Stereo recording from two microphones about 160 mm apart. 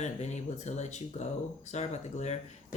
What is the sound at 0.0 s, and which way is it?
Speech, 45° left (ahead or behind).